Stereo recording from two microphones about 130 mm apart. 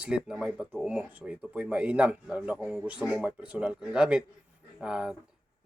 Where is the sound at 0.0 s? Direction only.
5° right (ahead or behind).